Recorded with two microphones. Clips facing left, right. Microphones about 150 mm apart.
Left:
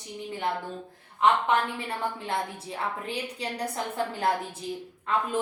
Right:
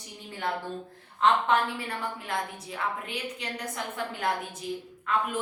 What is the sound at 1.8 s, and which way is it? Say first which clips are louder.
A woman's voice: left 3 dB; 30° left (ahead or behind).